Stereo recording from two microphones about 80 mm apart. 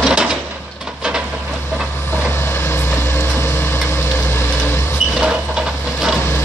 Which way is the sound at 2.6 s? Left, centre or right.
Left.